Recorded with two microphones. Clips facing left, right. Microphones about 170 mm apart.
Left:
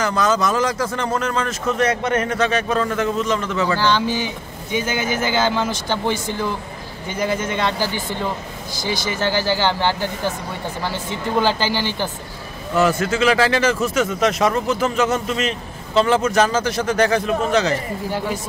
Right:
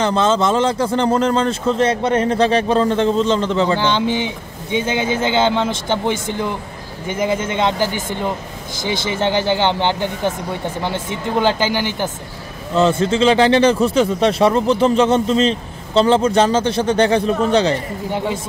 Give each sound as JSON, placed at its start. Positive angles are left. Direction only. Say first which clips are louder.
{"t": 0.0, "sound": "a man's voice", "louder": "right 3 dB", "side_deg": -25}
{"t": 12.7, "sound": "a man's voice", "louder": "right 3 dB", "side_deg": -25}